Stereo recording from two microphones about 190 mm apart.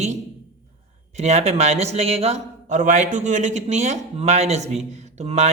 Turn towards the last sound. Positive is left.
turn(degrees=-35)  # may be behind; listen again after turning